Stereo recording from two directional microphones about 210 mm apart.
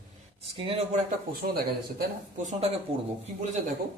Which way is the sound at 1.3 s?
45° right (ahead or behind).